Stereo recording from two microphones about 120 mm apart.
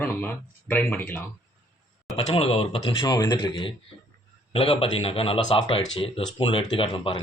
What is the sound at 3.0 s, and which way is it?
A man's voice, 35° left (ahead or behind).